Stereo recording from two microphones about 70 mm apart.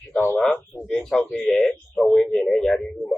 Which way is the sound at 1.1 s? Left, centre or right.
Centre.